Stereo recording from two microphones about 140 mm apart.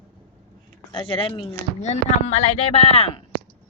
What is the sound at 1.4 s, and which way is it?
Speech, 50° left (ahead or behind).